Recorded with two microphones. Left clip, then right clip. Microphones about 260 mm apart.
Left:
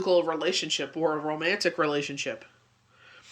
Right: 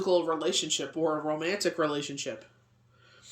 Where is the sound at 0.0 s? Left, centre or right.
Centre.